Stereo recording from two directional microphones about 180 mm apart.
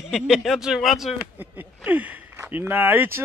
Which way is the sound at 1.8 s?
10° right (ahead or behind).